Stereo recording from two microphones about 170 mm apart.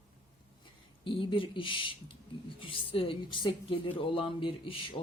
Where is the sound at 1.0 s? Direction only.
30° left (ahead or behind).